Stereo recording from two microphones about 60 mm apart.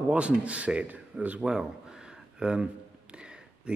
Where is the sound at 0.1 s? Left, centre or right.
Right.